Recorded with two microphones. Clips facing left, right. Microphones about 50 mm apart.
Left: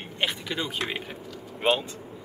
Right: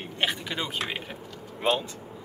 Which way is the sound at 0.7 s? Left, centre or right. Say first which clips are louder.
Left 1 dB; centre.